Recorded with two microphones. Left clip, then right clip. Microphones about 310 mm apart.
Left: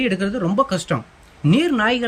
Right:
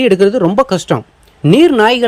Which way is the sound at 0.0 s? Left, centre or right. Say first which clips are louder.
Right 12 dB; centre.